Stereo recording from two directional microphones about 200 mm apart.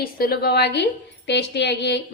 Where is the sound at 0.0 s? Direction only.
50° left (ahead or behind).